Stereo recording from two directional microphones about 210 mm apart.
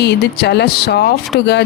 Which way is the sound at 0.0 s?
55° left (ahead or behind).